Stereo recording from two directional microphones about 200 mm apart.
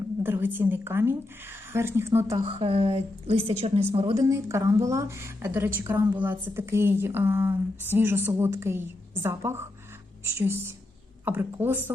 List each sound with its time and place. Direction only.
0.2 s a woman's voice: 10° right (ahead or behind)
2.4 s a woman's voice: 30° right (ahead or behind)
4.1 s a woman's voice: 15° right (ahead or behind)